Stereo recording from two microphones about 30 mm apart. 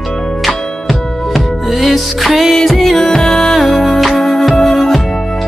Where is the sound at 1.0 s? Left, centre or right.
Centre.